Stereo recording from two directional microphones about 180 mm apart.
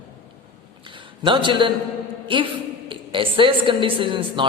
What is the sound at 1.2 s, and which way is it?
A woman's voice, 25° right (ahead or behind).